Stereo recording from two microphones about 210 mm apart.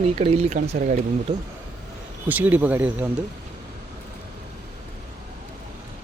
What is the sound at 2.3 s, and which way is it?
Speech, 10° right (ahead or behind).